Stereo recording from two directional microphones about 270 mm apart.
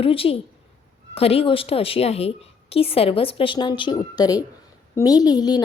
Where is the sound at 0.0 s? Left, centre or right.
Left.